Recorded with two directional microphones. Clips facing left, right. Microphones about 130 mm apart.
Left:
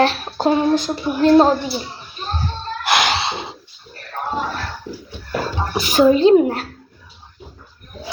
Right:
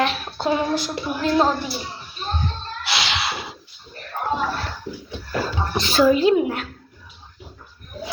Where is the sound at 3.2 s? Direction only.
25° left (ahead or behind).